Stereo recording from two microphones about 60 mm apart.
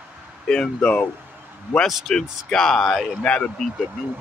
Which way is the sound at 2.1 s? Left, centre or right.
Centre.